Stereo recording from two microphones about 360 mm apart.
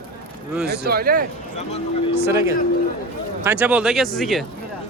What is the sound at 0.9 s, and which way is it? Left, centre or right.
Speech, right.